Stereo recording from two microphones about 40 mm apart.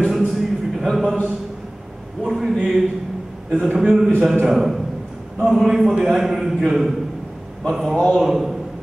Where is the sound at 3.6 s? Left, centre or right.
Centre.